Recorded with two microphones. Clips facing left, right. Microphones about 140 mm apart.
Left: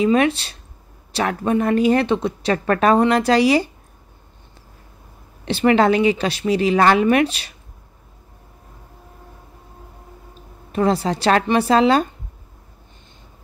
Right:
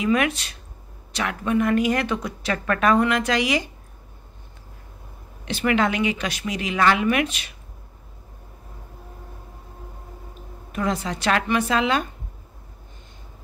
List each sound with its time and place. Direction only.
0.0 s a woman's voice: 30° left (ahead or behind)
5.4 s a woman's voice: 30° left (ahead or behind)
10.7 s a woman's voice: 35° left (ahead or behind)